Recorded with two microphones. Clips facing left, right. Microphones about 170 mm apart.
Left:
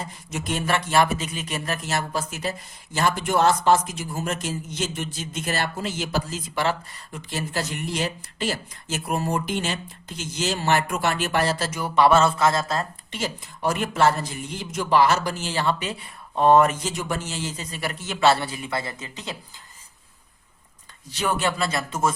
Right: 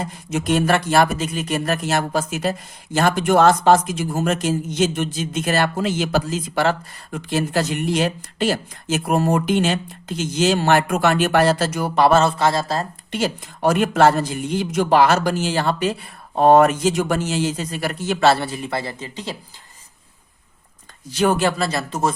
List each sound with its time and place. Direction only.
0.0 s speech: 85° right
0.7 s speech: 50° right (ahead or behind); by 4.0 s 90° right
4.2 s speech: 80° right
6.5 s speech: 50° right (ahead or behind); by 11.9 s 75° right (ahead or behind)
11.9 s a man's voice: 35° right (ahead or behind)
13.1 s speech: 75° right (ahead or behind)
15.5 s speech: 45° right (ahead or behind); by 17.7 s 75° right (ahead or behind)
18.3 s a man's voice: 35° right (ahead or behind)
21.2 s a man's voice: 45° right (ahead or behind)